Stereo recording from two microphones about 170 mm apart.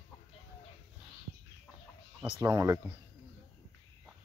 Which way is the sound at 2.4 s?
20° right (ahead or behind).